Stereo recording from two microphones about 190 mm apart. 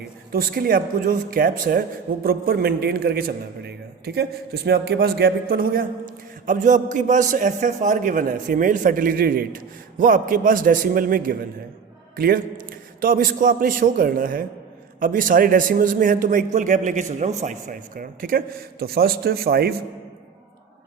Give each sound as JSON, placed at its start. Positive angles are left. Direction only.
{"t": 0.3, "sound": "a man's voice", "side_deg": -50}